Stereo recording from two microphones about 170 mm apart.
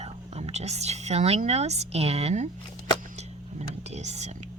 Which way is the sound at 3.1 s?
40° right (ahead or behind).